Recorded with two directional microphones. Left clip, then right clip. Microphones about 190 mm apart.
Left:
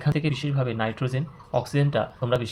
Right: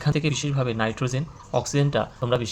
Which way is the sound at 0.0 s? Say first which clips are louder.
Right 2 dB; 20° right (ahead or behind).